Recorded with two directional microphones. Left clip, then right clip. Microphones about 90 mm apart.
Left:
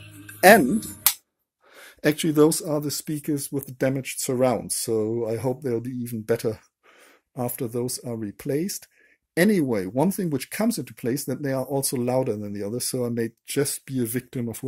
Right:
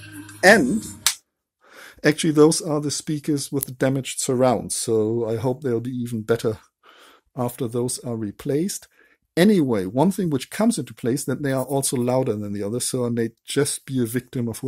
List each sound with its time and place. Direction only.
0.4 s speech: 15° left (ahead or behind)
1.8 s speech: 15° right (ahead or behind)